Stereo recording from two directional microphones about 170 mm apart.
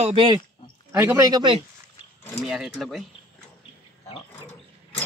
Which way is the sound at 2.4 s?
Centre (ahead or behind).